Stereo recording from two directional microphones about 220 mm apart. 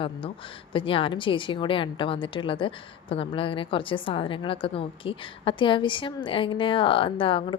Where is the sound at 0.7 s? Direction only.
25° left (ahead or behind).